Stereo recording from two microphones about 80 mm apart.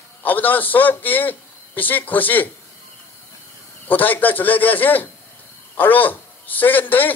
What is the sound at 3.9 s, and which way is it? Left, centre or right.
A man's voice, left.